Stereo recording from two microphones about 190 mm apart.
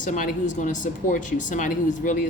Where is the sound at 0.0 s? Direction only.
40° left (ahead or behind).